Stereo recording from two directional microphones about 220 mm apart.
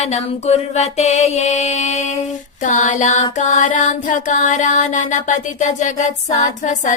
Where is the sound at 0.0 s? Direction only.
30° left (ahead or behind).